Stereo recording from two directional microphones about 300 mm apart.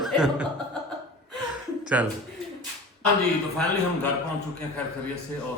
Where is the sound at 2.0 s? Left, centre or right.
Centre.